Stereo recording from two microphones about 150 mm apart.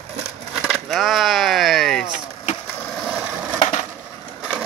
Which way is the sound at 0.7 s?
Centre (ahead or behind).